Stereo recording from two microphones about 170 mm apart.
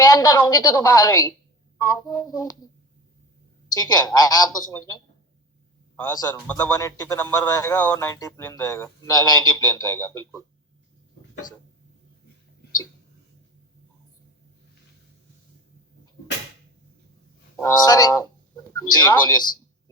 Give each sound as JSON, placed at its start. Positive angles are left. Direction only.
{"t": 0.0, "sound": "speech", "side_deg": 20}
{"t": 3.7, "sound": "speech", "side_deg": 20}
{"t": 6.1, "sound": "speech", "side_deg": 20}
{"t": 17.6, "sound": "speech", "side_deg": 20}